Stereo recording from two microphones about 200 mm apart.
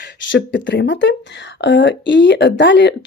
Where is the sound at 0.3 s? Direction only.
60° left (ahead or behind).